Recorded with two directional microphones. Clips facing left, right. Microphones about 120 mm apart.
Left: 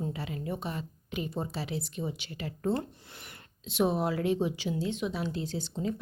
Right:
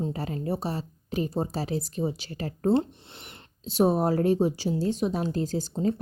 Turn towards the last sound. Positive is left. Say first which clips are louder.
# right 6 dB
turn(degrees=-40)  # may be behind; listen again after turning